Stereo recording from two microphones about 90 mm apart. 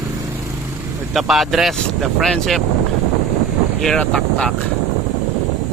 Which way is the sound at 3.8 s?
5° left (ahead or behind).